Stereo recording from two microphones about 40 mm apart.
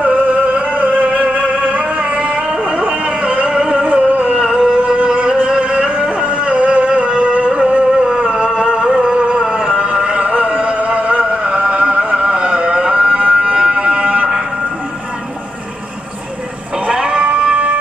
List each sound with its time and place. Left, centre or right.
0.0 s a sound: right
0.9 s music: right
2.4 s a sound: right
3.9 s music: right
4.2 s music: right
16.8 s music: right